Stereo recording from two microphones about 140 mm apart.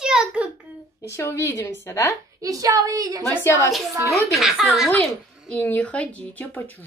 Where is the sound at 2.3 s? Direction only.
25° right (ahead or behind).